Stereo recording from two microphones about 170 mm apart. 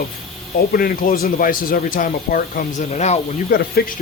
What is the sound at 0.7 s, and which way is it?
Speech, 60° left (ahead or behind).